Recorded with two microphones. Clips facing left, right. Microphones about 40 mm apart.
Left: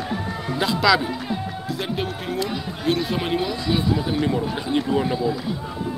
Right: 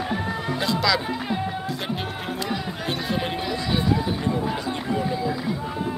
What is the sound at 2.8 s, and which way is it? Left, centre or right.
Speech, centre.